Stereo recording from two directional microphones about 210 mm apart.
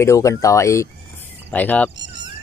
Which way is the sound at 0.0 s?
15° left (ahead or behind).